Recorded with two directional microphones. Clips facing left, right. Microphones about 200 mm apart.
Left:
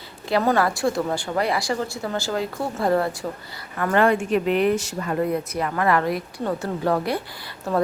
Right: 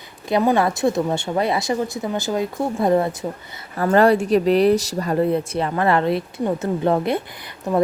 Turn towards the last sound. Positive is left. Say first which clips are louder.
# right 3 dB
turn(degrees=-20)  # may be behind; listen again after turning